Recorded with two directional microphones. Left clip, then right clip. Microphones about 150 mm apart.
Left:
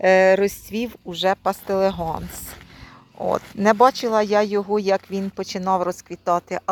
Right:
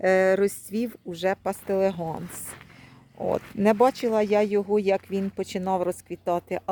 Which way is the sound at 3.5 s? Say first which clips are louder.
Left 5 dB; 15° right (ahead or behind).